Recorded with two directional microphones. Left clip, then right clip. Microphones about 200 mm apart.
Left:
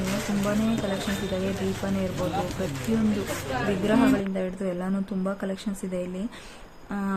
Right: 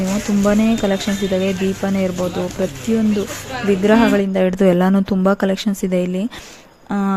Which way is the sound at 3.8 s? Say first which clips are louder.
Right 9 dB; 40° right (ahead or behind).